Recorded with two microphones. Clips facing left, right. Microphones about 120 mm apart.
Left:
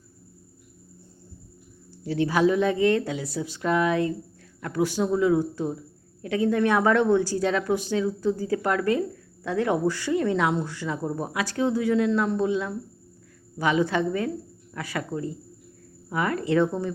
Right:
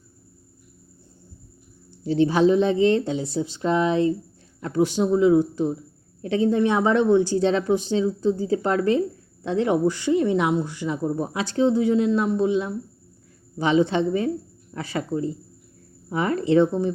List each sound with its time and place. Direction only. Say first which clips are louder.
1.9 s a woman's voice: right 4 dB; 25° right (ahead or behind)